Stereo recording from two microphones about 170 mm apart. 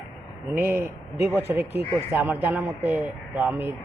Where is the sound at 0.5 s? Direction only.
10° right (ahead or behind).